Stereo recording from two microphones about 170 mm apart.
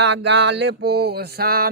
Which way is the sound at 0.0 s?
90° right.